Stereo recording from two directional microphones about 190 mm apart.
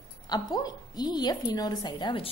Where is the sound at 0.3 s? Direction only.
20° left (ahead or behind).